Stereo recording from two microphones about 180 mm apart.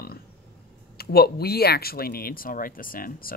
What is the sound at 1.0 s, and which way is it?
Speech, 60° left (ahead or behind).